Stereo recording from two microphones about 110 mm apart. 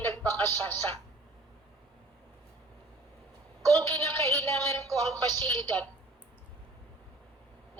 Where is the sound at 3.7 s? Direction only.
25° left (ahead or behind).